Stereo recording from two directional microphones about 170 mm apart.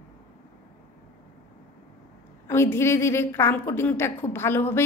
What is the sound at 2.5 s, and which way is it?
A woman's voice, 15° left (ahead or behind).